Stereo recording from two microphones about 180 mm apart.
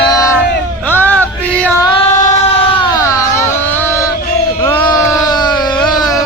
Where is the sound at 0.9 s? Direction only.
10° left (ahead or behind).